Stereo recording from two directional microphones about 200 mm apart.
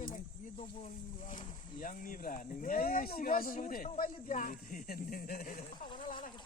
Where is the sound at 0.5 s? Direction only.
30° left (ahead or behind).